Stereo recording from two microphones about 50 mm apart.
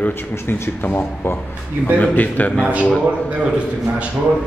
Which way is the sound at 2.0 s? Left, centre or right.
Left.